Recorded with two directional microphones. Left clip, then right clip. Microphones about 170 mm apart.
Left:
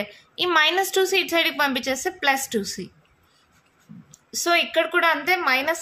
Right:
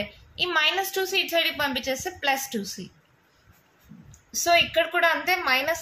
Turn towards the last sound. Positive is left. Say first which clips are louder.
# left 2 dB
turn(degrees=30)  # may be behind; listen again after turning